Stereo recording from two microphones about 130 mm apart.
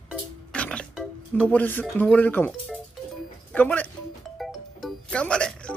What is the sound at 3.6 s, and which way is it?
Speech, 15° left (ahead or behind).